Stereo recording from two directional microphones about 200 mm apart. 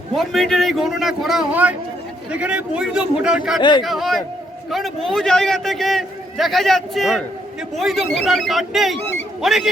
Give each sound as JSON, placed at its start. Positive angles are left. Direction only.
{"t": 0.2, "sound": "a man's voice", "side_deg": 0}
{"t": 3.6, "sound": "speech", "side_deg": 20}
{"t": 3.8, "sound": "a man's voice", "side_deg": 0}
{"t": 9.0, "sound": "speech", "side_deg": 10}
{"t": 9.4, "sound": "a man's voice", "side_deg": 0}